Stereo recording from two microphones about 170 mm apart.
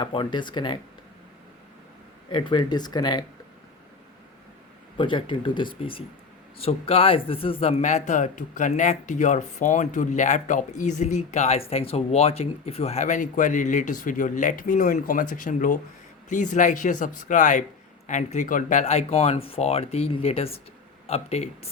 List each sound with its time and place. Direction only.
0.0 s speech: 30° left (ahead or behind)
2.3 s speech: 30° left (ahead or behind)
4.9 s speech: 30° left (ahead or behind)